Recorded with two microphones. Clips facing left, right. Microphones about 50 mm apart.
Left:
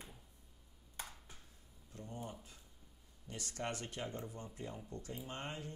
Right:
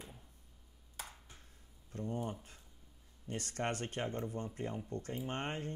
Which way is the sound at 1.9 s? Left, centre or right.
Right.